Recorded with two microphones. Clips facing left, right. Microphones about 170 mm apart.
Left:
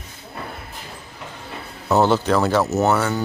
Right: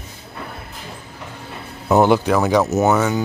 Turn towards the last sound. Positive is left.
turn(degrees=-10)  # may be behind; listen again after turning